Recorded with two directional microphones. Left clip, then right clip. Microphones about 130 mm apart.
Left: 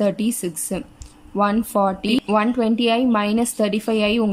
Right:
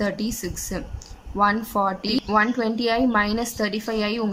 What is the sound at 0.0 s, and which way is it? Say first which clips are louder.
A woman's voice: left 5 dB; 20° left (ahead or behind).